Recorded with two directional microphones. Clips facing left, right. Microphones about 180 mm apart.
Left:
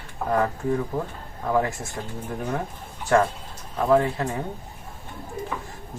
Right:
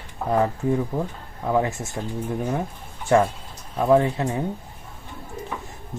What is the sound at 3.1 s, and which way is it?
Speech, 20° right (ahead or behind).